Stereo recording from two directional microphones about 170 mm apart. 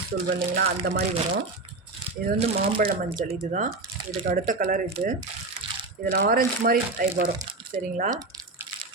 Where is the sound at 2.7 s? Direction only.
60° right (ahead or behind).